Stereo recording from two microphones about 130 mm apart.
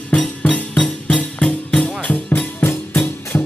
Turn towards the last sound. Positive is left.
turn(degrees=15)  # may be behind; listen again after turning